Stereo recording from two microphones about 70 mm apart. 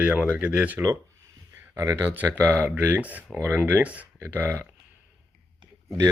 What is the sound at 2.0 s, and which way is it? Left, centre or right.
Speech, right.